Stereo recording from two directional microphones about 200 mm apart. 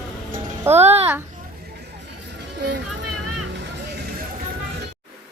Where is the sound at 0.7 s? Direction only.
10° right (ahead or behind).